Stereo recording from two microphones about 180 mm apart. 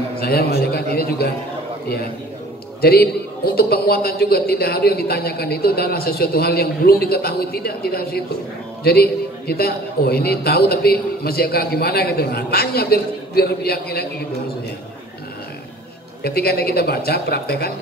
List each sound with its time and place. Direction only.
0.2 s a man's voice: 60° left (ahead or behind)
2.8 s a man's voice: 60° left (ahead or behind)
16.2 s a man's voice: 60° left (ahead or behind)